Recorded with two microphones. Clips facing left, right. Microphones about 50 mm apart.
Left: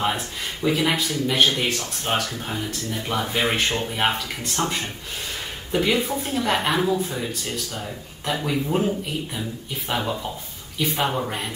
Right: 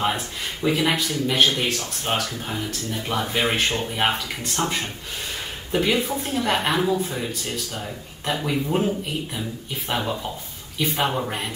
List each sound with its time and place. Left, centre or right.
0.0 s speech: centre
4.1 s speech: centre
8.3 s speech: centre